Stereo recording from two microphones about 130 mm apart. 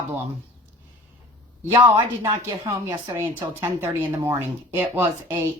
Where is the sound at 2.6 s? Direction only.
15° right (ahead or behind).